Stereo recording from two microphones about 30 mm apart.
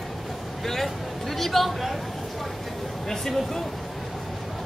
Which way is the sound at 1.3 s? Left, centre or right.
Centre.